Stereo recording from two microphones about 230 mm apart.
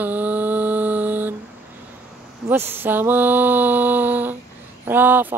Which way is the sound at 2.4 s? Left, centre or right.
Centre.